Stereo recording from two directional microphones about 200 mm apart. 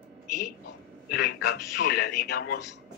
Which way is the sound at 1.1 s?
55° left (ahead or behind).